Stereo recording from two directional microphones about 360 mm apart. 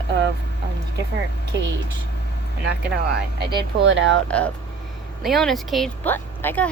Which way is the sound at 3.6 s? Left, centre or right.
Right.